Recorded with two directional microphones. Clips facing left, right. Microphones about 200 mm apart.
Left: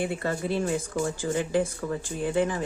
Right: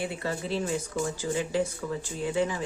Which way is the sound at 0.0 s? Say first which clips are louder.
Left 3 dB; 50° left (ahead or behind).